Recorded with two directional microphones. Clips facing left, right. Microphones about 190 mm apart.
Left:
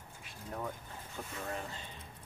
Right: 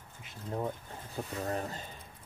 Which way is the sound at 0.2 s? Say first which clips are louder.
Right 6 dB; 25° right (ahead or behind).